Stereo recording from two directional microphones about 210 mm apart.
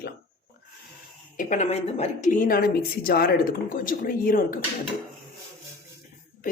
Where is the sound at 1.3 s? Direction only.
35° left (ahead or behind).